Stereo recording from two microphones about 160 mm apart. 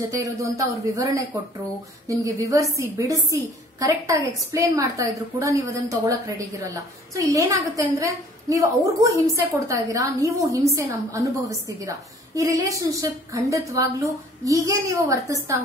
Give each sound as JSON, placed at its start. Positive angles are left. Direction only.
{"t": 0.1, "sound": "a woman's voice", "side_deg": -20}
{"t": 4.5, "sound": "a woman's voice", "side_deg": -20}